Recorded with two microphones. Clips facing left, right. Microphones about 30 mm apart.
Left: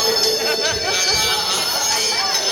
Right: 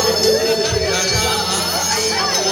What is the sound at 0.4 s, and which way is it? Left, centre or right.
Music, left.